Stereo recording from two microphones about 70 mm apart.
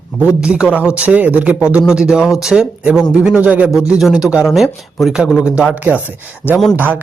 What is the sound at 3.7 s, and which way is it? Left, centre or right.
A woman's voice, centre.